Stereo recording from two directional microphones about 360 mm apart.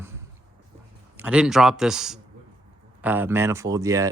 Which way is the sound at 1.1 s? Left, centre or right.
Centre.